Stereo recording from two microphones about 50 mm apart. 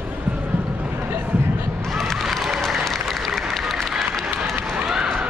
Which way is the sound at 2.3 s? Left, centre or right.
Centre.